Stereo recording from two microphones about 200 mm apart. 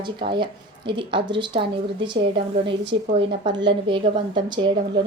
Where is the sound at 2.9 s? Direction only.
25° right (ahead or behind).